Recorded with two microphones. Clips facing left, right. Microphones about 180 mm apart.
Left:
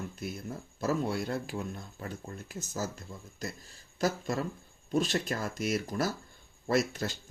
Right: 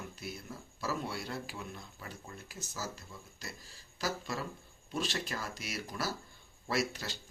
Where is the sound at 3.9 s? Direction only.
50° left (ahead or behind).